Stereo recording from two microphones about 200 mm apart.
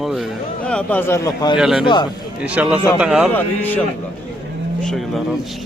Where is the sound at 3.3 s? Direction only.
10° left (ahead or behind).